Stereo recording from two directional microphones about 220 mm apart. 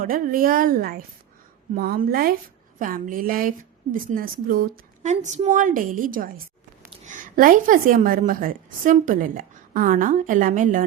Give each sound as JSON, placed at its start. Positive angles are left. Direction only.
{"t": 0.0, "sound": "a woman's voice", "side_deg": -40}